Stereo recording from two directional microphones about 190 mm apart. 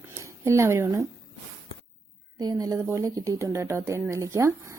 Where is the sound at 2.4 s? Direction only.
20° right (ahead or behind).